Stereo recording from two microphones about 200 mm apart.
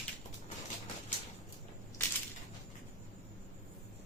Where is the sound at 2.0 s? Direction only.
10° left (ahead or behind).